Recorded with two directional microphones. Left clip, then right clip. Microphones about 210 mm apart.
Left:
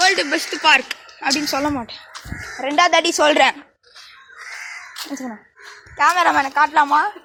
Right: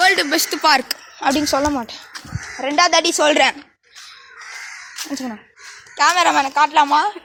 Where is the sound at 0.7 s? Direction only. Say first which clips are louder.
Left 2 dB; 50° right (ahead or behind).